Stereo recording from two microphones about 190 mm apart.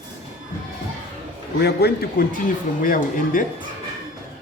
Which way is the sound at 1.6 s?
60° left (ahead or behind).